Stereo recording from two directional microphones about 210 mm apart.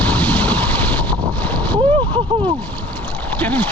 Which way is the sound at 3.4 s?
5° left (ahead or behind).